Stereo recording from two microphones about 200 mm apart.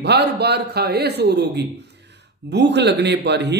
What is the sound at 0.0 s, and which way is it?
A man's voice, 55° right (ahead or behind).